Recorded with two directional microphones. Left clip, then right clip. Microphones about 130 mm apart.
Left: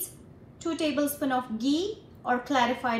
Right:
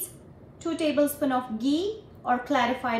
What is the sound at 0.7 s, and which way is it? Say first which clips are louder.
A woman's voice: right 3 dB; centre (ahead or behind).